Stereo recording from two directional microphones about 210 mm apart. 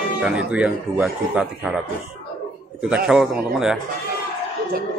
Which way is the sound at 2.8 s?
5° right (ahead or behind).